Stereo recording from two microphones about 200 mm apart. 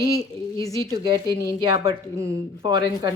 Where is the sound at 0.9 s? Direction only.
20° right (ahead or behind).